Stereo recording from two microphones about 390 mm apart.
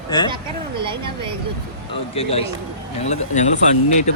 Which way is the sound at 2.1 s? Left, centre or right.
Centre.